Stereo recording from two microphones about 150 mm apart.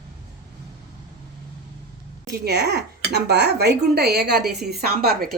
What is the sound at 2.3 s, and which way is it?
A woman's voice, 90° right.